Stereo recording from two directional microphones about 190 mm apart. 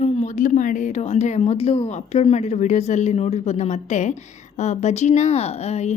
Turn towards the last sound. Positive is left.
turn(degrees=35)  # may be behind; listen again after turning